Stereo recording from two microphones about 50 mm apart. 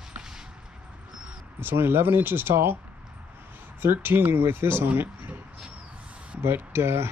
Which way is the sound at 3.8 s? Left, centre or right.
Right.